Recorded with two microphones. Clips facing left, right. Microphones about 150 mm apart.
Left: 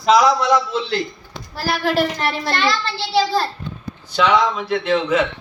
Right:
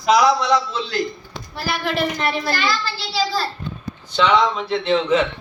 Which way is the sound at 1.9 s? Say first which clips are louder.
Left 2 dB; 70° left (ahead or behind).